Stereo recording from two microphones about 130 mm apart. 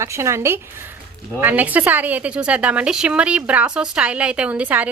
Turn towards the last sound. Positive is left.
turn(degrees=-10)  # may be behind; listen again after turning